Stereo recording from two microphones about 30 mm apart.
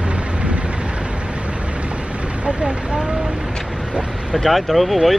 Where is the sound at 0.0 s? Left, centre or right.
Right.